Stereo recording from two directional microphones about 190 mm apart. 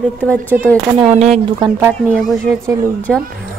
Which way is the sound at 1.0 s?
35° right (ahead or behind).